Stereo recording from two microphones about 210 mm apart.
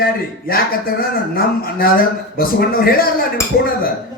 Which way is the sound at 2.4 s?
45° left (ahead or behind).